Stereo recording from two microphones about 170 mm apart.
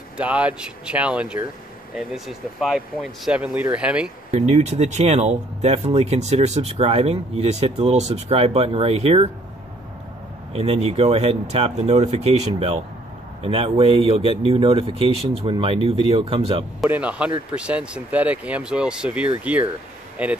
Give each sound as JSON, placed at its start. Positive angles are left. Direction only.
{"t": 0.2, "sound": "speech", "side_deg": -10}
{"t": 4.3, "sound": "speech", "side_deg": -40}
{"t": 10.5, "sound": "speech", "side_deg": -35}
{"t": 16.8, "sound": "speech", "side_deg": -5}